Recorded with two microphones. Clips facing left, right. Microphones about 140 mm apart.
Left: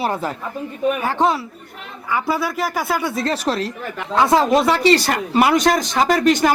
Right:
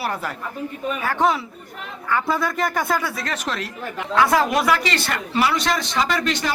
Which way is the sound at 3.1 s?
30° left (ahead or behind).